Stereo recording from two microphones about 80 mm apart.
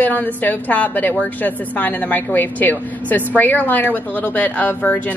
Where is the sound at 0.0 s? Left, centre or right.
Left.